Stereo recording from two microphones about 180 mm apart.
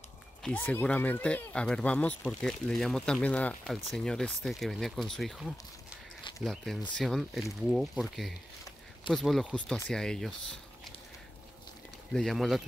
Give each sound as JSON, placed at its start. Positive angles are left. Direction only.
{"t": 0.4, "sound": "speech", "side_deg": 5}
{"t": 12.1, "sound": "speech", "side_deg": 0}